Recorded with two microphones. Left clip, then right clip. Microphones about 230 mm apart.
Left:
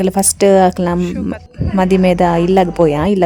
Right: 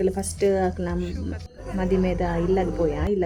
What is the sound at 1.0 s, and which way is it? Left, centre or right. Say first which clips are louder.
Speech: left 11 dB; centre.